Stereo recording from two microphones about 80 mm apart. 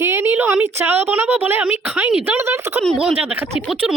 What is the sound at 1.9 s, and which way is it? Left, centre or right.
Speech, centre.